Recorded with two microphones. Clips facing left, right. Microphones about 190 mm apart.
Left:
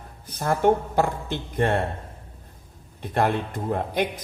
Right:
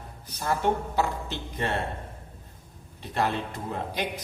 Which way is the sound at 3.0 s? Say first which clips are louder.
Left 5 dB; 55° left (ahead or behind).